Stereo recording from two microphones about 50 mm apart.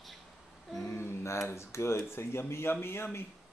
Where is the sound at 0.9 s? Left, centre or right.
Left.